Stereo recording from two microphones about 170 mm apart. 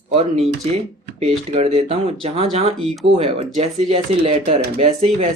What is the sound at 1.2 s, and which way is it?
Speech, 40° right (ahead or behind).